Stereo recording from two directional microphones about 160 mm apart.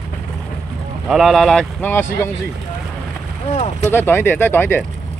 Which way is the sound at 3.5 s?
50° left (ahead or behind).